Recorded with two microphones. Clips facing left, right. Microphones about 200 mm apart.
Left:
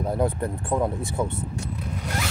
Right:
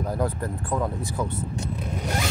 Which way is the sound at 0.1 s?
25° left (ahead or behind).